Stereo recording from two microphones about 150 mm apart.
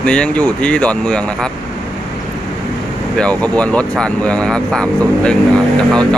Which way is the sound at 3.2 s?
10° left (ahead or behind).